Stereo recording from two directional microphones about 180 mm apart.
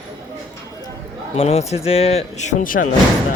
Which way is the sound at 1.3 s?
35° left (ahead or behind).